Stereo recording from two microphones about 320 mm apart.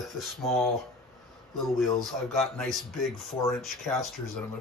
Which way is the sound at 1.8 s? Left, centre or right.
Centre.